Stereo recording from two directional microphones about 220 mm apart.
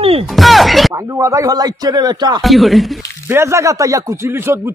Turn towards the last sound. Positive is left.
turn(degrees=-10)  # may be behind; listen again after turning